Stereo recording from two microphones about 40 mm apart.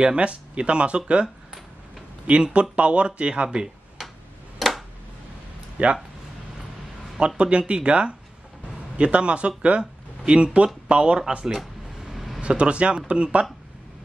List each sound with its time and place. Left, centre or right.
0.0 s speech: right
2.4 s speech: right
4.0 s tick-tock: centre
4.6 s a sound: centre
5.8 s speech: right
7.2 s speech: right
12.1 s a sound: centre
12.4 s speech: right